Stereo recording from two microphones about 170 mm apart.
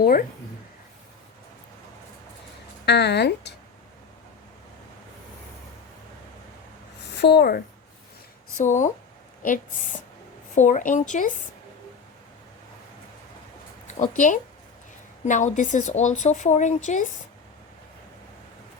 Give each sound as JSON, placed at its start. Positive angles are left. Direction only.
{"t": 0.0, "sound": "speech", "side_deg": 55}
{"t": 2.8, "sound": "speech", "side_deg": 80}
{"t": 7.2, "sound": "speech", "side_deg": 75}
{"t": 8.5, "sound": "a woman's voice", "side_deg": 45}
{"t": 10.5, "sound": "a woman's voice", "side_deg": 45}
{"t": 13.8, "sound": "a woman's voice", "side_deg": 45}